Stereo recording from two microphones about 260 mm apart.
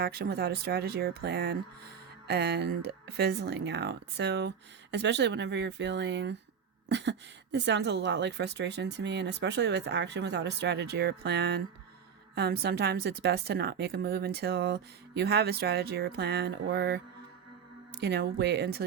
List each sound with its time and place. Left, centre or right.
0.0 s a woman's voice: right